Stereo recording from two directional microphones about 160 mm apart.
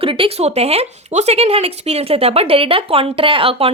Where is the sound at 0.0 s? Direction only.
35° right (ahead or behind).